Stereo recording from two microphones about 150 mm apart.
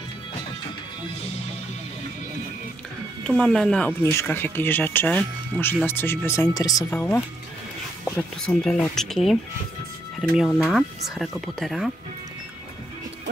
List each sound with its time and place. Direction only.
3.3 s speech: 5° left (ahead or behind)
4.0 s speech: 20° left (ahead or behind)
7.0 s speech: 15° left (ahead or behind)